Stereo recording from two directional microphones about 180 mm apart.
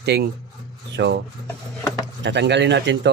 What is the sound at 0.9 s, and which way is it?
Filing, 75° right (ahead or behind).